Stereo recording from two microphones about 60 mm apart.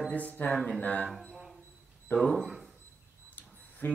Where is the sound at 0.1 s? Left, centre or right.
Left.